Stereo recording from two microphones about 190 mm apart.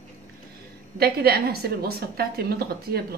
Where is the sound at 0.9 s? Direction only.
55° right (ahead or behind).